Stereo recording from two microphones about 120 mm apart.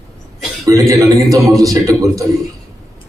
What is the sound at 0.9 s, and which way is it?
A man's voice, 30° right (ahead or behind).